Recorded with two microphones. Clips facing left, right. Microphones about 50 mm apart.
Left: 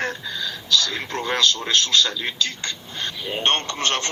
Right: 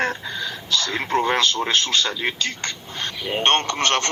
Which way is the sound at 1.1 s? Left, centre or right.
Centre.